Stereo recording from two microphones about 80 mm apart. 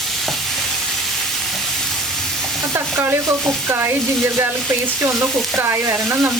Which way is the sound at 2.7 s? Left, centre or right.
Right.